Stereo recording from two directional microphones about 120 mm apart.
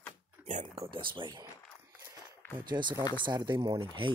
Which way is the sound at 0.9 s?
45° right (ahead or behind).